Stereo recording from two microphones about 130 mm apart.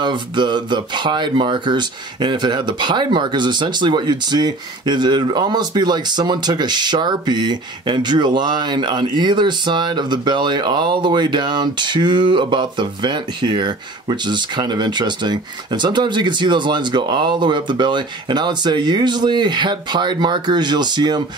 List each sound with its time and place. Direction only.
0.0 s speech: 35° right (ahead or behind)